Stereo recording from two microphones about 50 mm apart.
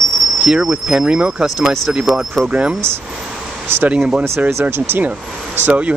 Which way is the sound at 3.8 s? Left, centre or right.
Right.